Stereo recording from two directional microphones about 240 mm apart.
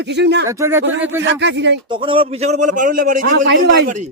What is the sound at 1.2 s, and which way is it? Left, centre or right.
Speech, right.